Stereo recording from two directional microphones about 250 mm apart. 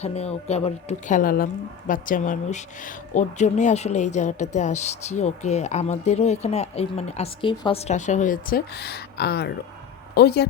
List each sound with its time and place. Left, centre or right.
0.0 s a woman's voice: left